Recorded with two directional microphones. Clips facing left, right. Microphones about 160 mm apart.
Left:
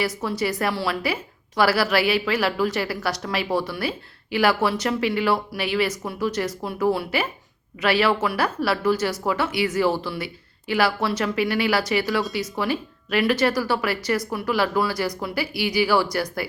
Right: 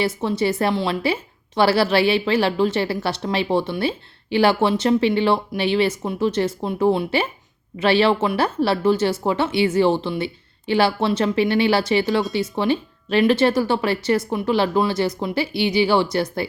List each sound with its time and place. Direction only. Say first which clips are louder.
0.0 s a woman's voice: right 4 dB; 25° right (ahead or behind)